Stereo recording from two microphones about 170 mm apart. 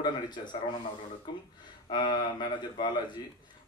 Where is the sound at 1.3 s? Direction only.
25° left (ahead or behind).